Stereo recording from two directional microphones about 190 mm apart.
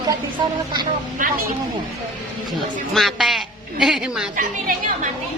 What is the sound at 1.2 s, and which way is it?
Speech, 45° right (ahead or behind).